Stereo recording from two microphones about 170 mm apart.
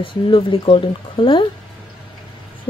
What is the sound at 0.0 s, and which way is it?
Speech, 30° left (ahead or behind).